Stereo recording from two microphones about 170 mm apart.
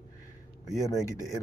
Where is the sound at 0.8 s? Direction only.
15° left (ahead or behind).